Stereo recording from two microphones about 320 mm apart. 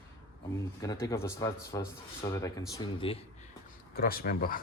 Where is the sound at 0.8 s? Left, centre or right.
Centre.